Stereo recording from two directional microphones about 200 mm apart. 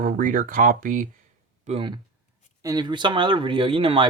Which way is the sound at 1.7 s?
25° right (ahead or behind).